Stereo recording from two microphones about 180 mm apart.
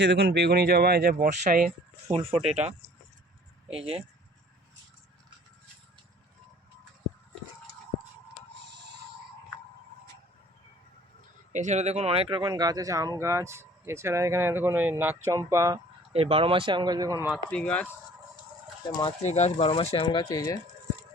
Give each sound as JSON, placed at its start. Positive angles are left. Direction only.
{"t": 0.0, "sound": "speech", "side_deg": -70}
{"t": 2.1, "sound": "speech", "side_deg": -30}
{"t": 3.7, "sound": "speech", "side_deg": -30}
{"t": 8.7, "sound": "music", "side_deg": -75}
{"t": 11.5, "sound": "speech", "side_deg": -40}
{"t": 16.1, "sound": "speech", "side_deg": -30}
{"t": 17.5, "sound": "speech", "side_deg": 5}
{"t": 18.9, "sound": "speech", "side_deg": 25}
{"t": 19.2, "sound": "speech", "side_deg": 40}
{"t": 20.1, "sound": "speech", "side_deg": 20}